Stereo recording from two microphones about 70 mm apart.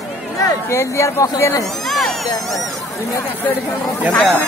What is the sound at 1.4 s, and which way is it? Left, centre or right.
Speech, left.